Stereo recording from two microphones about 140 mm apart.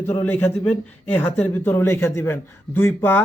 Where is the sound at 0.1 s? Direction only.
15° left (ahead or behind).